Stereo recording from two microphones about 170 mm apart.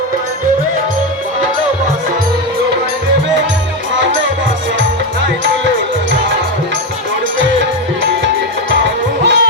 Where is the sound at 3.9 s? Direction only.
90° right.